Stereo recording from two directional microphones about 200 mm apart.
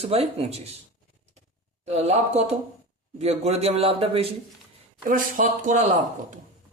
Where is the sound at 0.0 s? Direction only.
30° right (ahead or behind).